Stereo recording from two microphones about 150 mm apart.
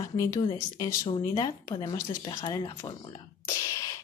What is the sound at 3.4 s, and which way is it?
Whispering, 20° left (ahead or behind).